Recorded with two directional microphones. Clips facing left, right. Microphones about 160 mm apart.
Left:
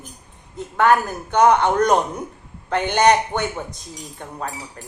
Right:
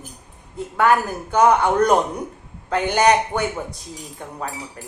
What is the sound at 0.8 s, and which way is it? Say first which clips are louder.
Speech: left 1 dB; 10° right (ahead or behind).